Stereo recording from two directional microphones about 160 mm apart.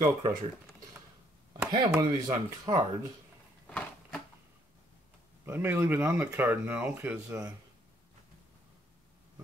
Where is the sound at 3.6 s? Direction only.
5° left (ahead or behind).